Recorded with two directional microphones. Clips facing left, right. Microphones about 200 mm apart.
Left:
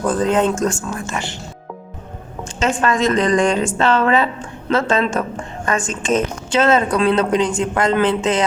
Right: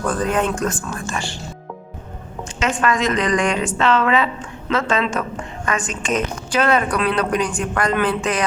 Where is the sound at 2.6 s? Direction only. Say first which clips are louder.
Left 2 dB; 30° left (ahead or behind).